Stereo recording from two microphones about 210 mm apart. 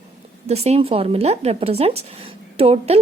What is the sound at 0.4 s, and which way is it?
A woman's voice, 30° right (ahead or behind).